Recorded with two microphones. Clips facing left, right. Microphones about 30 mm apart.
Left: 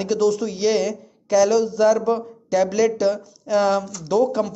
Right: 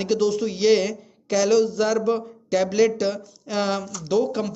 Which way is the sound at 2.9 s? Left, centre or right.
Right.